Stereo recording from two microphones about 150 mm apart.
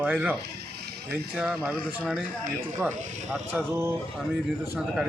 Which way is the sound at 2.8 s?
15° right (ahead or behind).